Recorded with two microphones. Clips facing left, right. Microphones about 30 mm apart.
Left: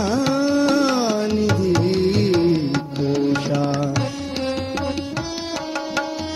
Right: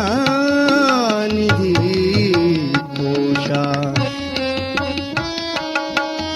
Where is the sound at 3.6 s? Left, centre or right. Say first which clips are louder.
Right 2 dB; right.